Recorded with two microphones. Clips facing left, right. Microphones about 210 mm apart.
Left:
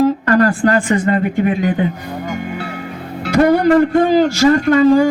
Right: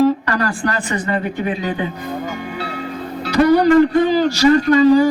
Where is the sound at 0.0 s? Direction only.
50° left (ahead or behind).